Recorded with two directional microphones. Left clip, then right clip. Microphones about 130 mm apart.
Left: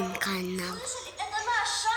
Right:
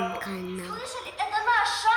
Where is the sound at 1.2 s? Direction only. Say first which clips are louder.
Right 5 dB; 40° right (ahead or behind).